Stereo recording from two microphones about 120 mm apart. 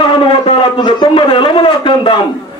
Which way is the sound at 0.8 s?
40° left (ahead or behind).